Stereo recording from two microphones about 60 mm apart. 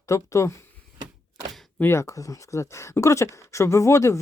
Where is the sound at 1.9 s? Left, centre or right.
Left.